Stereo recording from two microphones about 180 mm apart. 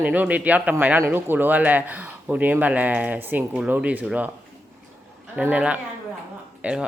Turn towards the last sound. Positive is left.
turn(degrees=-5)  # may be behind; listen again after turning